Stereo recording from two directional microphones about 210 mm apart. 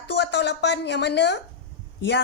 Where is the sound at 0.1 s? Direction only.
55° left (ahead or behind).